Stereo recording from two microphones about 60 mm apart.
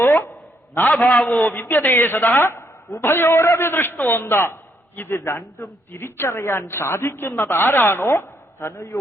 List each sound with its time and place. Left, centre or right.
0.0 s a sound: left
0.9 s a man's voice: centre
1.3 s a woman's voice: left